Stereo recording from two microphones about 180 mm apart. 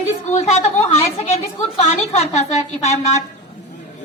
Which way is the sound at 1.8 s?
35° left (ahead or behind).